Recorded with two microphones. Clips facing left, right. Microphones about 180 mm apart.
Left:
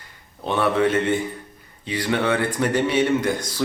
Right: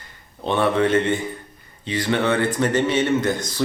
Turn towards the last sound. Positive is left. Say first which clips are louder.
# even
turn(degrees=10)  # may be behind; listen again after turning